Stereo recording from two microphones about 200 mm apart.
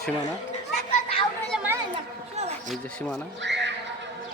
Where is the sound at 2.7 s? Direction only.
5° left (ahead or behind).